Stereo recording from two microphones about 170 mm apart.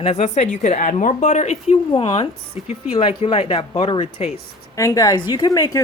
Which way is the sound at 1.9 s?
30° left (ahead or behind).